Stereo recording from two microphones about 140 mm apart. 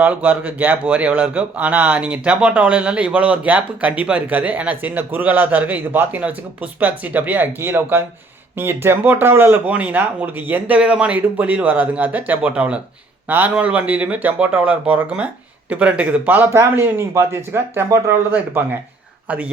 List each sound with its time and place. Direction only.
0.0 s speech: 10° right (ahead or behind)